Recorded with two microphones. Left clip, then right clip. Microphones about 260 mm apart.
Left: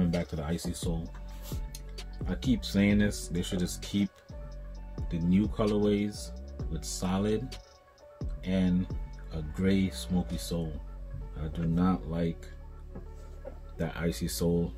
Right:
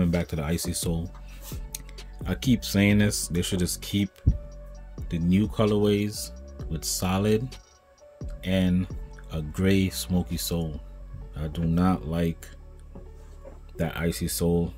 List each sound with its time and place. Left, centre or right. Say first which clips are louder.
0.2 s speech: right 5 dB; right
2.2 s speech: right 5 dB; right
13.7 s speech: right 5 dB; right